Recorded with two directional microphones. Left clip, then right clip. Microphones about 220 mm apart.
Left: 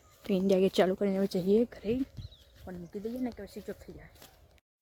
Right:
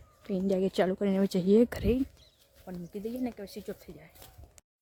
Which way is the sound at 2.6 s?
Centre (ahead or behind).